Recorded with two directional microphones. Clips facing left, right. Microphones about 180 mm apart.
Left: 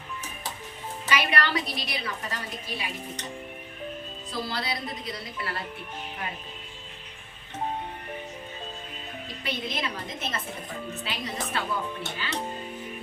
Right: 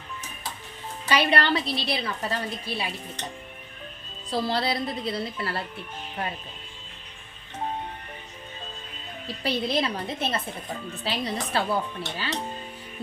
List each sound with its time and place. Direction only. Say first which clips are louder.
1.0 s a woman's voice: right 4 dB; 30° right (ahead or behind)
4.3 s a woman's voice: right 7 dB; 30° right (ahead or behind)
9.2 s a woman's voice: right 7 dB; 35° right (ahead or behind)